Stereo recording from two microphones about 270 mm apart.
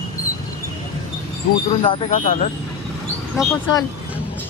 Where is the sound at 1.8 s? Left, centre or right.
Centre.